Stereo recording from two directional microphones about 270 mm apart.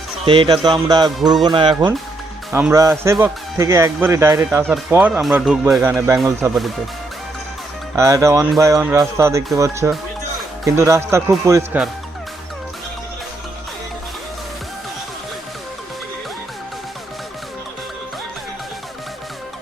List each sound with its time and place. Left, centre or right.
0.3 s speech: centre
7.9 s speech: centre